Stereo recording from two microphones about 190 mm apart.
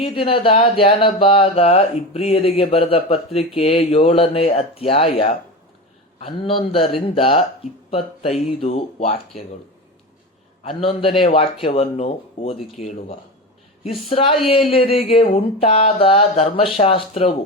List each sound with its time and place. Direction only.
0.0 s speech: 30° left (ahead or behind)
10.6 s speech: 30° left (ahead or behind)